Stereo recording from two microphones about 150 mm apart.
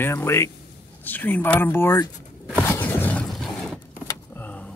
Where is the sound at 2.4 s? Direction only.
10° left (ahead or behind).